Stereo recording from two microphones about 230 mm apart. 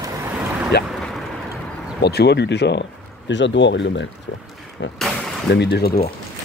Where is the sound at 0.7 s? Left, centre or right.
Left.